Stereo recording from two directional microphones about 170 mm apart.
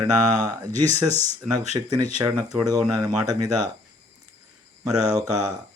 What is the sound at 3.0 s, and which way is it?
Speech, 25° right (ahead or behind).